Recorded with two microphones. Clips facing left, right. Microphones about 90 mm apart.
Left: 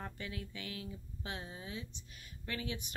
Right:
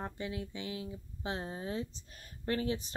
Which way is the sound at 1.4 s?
40° right (ahead or behind).